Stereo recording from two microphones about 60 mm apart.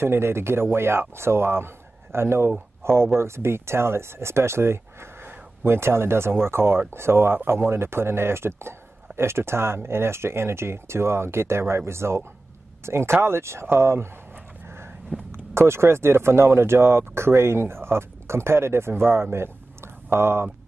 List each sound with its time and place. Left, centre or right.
0.0 s a man's voice: right
15.5 s a man's voice: right
19.3 s a sound: right